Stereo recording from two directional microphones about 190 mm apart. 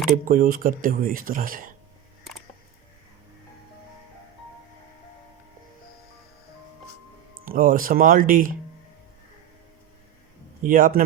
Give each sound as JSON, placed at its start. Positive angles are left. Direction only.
{"t": 0.3, "sound": "speech", "side_deg": -50}
{"t": 7.4, "sound": "speech", "side_deg": -45}
{"t": 10.6, "sound": "speech", "side_deg": -45}